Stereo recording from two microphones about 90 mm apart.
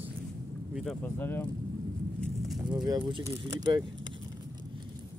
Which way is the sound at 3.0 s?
70° right (ahead or behind).